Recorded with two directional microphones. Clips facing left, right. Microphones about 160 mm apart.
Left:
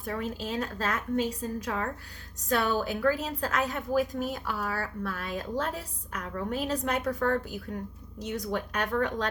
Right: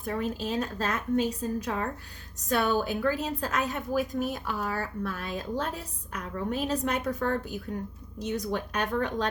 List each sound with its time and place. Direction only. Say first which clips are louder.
0.0 s a woman's voice: right 2 dB; 20° right (ahead or behind)